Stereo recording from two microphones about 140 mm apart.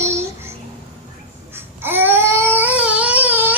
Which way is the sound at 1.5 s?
15° right (ahead or behind).